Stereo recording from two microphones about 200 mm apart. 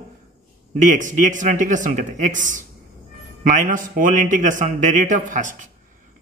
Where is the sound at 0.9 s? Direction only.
40° right (ahead or behind).